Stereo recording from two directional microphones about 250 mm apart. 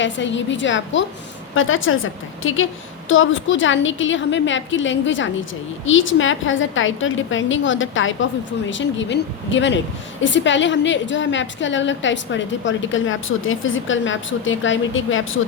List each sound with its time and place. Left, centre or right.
0.0 s a woman's voice: left